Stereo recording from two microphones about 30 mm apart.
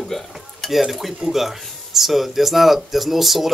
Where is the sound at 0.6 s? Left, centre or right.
Centre.